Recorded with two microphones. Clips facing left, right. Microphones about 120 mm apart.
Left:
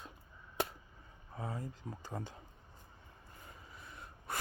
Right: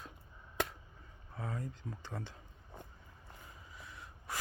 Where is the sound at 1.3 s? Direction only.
15° left (ahead or behind).